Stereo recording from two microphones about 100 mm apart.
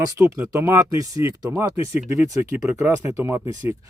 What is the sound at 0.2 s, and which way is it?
Speech, 25° right (ahead or behind).